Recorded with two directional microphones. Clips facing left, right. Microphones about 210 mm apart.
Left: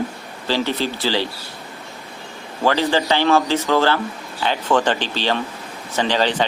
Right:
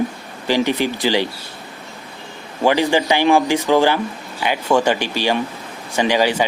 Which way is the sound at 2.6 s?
15° right (ahead or behind).